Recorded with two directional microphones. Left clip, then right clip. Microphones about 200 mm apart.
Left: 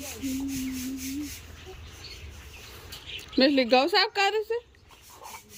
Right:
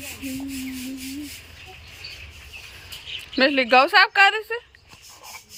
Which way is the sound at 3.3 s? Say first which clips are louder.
Right 5 dB; 5° left (ahead or behind).